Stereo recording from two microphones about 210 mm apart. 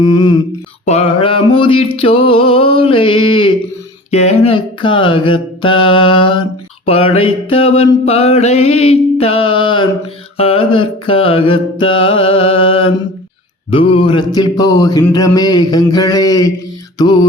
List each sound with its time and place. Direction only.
0.0 s mantra: 20° left (ahead or behind)
15.1 s a sound: 20° left (ahead or behind)
17.0 s mantra: 20° left (ahead or behind)